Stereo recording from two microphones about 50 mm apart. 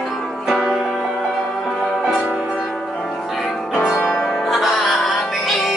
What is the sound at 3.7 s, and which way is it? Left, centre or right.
Music, left.